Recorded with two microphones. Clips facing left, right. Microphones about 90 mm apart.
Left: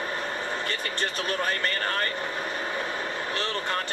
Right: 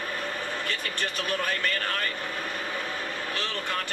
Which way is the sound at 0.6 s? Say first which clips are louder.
Left 2 dB; 20° left (ahead or behind).